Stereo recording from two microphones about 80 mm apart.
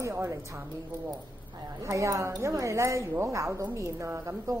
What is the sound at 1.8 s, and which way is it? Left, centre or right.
A woman's voice, right.